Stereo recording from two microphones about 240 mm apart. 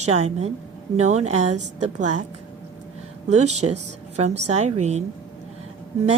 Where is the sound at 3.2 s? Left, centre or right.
Right.